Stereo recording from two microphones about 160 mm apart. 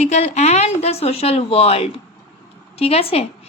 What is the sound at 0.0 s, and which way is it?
A woman's voice, 45° left (ahead or behind).